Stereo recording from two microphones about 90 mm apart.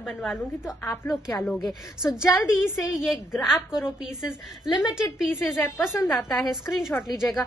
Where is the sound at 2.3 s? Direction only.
30° left (ahead or behind).